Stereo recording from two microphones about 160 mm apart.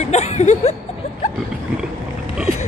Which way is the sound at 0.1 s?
45° left (ahead or behind).